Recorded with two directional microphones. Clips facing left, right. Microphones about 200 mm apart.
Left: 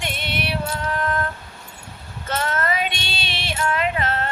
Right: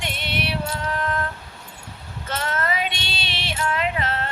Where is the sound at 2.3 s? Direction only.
50° left (ahead or behind).